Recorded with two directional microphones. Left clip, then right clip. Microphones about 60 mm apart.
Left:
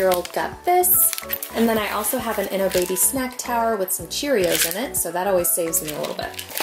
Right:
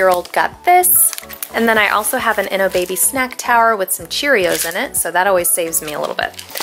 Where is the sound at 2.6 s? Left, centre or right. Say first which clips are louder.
Right 5 dB; centre.